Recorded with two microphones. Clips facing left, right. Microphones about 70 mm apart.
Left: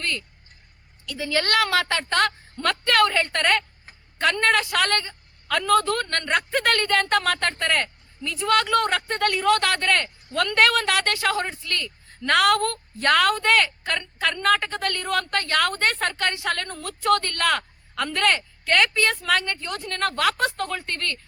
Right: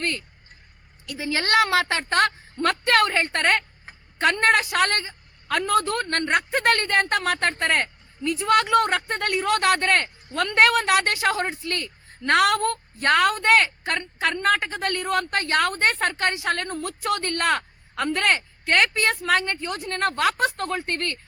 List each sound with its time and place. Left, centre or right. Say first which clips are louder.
0.0 s vehicle: right 1 dB; right
1.0 s speech: left 1 dB; right